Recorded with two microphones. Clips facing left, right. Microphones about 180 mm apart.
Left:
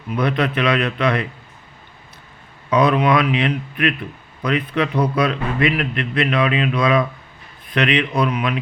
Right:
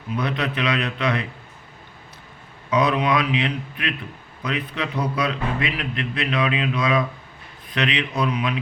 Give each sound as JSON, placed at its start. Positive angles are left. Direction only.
{"t": 0.2, "sound": "a man's voice", "side_deg": 60}
{"t": 2.6, "sound": "a man's voice", "side_deg": 55}